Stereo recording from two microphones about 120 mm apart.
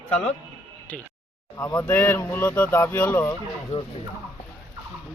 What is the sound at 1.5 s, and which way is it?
Speech, 30° left (ahead or behind).